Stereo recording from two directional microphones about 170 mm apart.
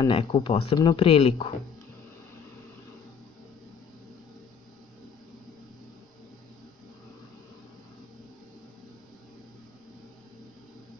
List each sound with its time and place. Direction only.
0.0 s speech: 30° left (ahead or behind)